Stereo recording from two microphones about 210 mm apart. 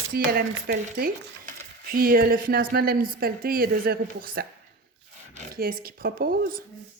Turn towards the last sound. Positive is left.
turn(degrees=-45)  # may be behind; listen again after turning